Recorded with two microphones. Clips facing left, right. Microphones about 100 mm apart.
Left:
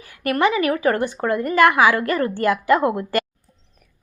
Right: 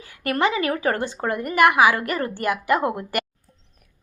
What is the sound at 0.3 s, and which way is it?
A woman's voice, 30° right (ahead or behind).